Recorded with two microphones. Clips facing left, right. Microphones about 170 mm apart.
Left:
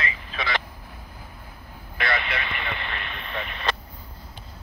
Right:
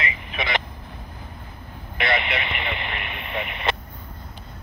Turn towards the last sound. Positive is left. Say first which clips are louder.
# right 3 dB
turn(degrees=-15)  # may be behind; listen again after turning